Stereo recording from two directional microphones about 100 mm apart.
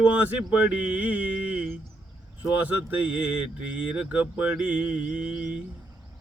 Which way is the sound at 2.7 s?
15° right (ahead or behind).